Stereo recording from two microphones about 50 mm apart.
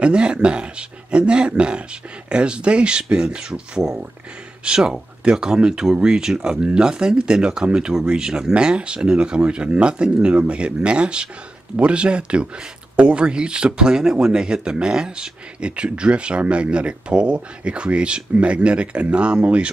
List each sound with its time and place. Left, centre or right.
0.0 s speech: right